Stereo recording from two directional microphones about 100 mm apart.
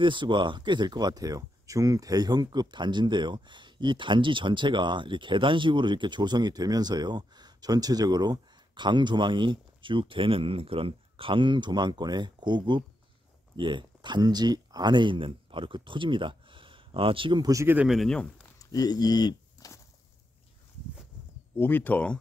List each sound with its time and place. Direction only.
0.0 s speech: 50° right (ahead or behind)
17.4 s speech: 35° right (ahead or behind)
17.8 s speech: centre (ahead or behind)
18.6 s a sound: 35° left (ahead or behind)
21.5 s speech: 20° left (ahead or behind)